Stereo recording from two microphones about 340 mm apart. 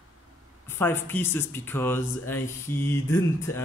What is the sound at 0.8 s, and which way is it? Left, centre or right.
Speech, centre.